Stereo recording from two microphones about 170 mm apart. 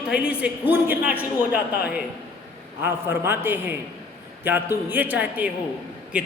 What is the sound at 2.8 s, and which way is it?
A man's voice, 10° right (ahead or behind).